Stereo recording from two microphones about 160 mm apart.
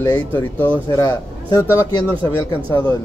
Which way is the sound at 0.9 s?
25° left (ahead or behind).